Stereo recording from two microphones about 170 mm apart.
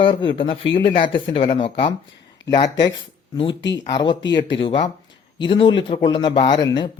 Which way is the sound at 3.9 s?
25° left (ahead or behind).